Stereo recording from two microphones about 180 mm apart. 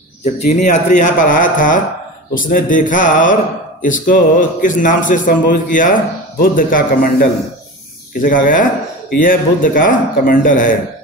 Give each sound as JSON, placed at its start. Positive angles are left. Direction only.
{"t": 0.2, "sound": "speech", "side_deg": 40}